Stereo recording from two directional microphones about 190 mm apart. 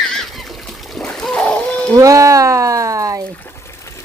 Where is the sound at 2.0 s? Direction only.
15° right (ahead or behind).